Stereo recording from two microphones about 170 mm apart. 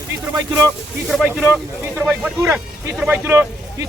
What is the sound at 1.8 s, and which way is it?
Speech, 10° right (ahead or behind).